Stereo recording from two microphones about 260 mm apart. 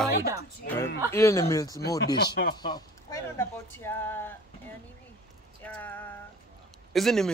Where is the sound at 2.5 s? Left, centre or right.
Centre.